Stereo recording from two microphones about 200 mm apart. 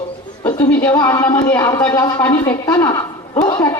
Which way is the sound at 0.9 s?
20° left (ahead or behind).